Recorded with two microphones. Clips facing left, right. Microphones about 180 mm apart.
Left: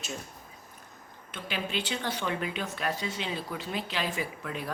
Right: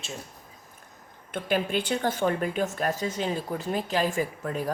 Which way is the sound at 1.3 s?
50° right (ahead or behind).